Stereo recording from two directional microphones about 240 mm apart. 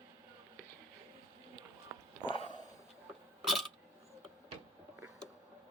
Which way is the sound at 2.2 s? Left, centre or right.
Left.